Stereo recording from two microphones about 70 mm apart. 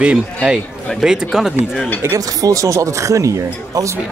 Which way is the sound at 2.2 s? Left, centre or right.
Right.